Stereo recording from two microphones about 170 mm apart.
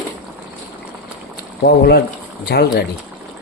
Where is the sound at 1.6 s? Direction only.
70° left (ahead or behind).